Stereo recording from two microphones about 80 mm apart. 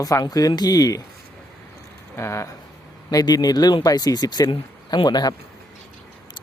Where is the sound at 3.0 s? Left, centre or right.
Left.